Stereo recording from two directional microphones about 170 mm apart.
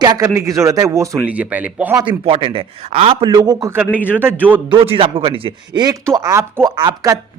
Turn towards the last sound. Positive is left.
turn(degrees=-25)  # may be behind; listen again after turning